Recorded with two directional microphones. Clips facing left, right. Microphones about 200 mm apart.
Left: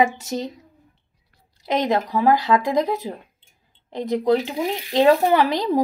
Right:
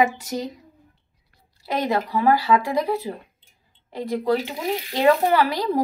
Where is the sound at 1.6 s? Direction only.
20° left (ahead or behind).